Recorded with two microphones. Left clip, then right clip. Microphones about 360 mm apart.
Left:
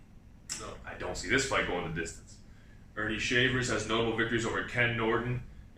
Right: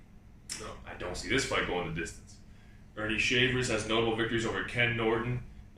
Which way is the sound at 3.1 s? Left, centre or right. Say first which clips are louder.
Right 1 dB; centre.